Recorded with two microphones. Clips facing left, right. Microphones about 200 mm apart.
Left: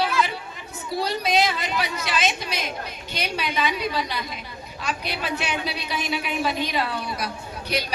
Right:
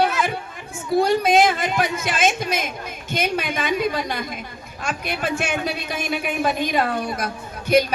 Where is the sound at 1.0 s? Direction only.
50° right (ahead or behind).